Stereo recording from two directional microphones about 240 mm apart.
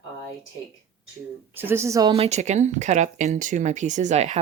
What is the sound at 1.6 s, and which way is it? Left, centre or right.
Speech, centre.